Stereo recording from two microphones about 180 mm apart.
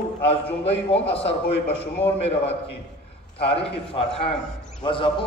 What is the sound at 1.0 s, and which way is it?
Speech, 35° left (ahead or behind).